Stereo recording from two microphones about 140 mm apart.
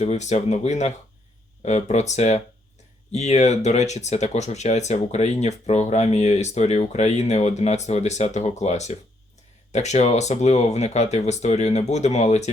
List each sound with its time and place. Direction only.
0.0 s speech: 55° left (ahead or behind)